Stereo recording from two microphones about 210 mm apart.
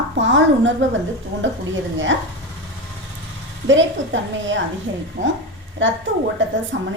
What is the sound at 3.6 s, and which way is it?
Speech, 60° right (ahead or behind).